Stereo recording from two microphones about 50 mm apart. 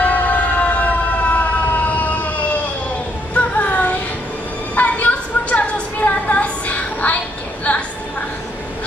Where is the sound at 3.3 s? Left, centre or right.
Left.